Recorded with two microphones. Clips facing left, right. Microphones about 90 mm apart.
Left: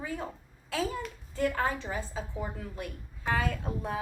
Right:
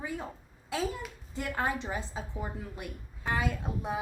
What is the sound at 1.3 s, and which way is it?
Speech, 15° right (ahead or behind).